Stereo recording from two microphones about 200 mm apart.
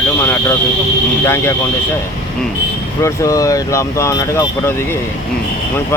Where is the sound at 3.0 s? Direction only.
15° left (ahead or behind).